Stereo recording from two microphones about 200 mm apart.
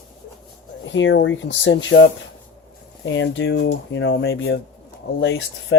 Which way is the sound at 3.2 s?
65° left (ahead or behind).